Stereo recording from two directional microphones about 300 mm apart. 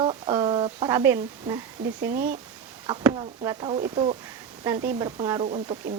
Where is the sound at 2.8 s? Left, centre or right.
Centre.